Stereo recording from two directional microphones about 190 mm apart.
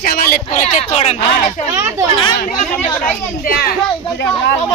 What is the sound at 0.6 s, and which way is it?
Speech, 35° left (ahead or behind).